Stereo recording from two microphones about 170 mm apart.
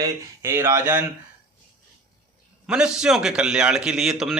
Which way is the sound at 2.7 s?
5° right (ahead or behind).